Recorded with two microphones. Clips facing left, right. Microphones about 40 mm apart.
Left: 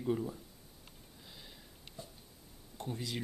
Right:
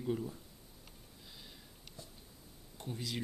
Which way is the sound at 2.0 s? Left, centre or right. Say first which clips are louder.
Left 4 dB; left.